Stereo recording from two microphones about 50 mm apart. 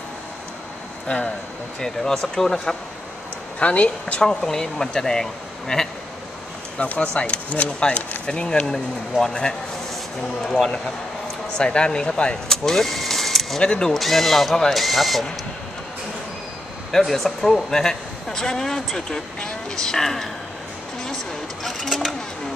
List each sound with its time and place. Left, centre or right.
1.0 s speech: left
1.8 s speech: centre
3.5 s speech: left
4.2 s speech: centre
6.8 s speech: left
11.5 s speech: centre
12.4 s vehicle: centre
13.6 s speech: centre
13.9 s speech: centre
16.9 s speech: centre
21.6 s speech: centre